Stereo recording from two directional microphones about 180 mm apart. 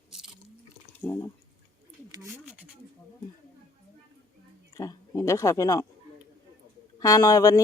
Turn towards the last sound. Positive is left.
turn(degrees=20)  # may be behind; listen again after turning